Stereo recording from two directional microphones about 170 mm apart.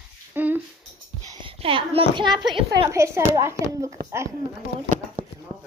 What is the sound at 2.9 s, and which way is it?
A child's voice, 15° right (ahead or behind).